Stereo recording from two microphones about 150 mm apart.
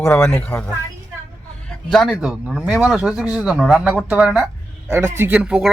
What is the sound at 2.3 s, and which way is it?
Speech, 5° right (ahead or behind).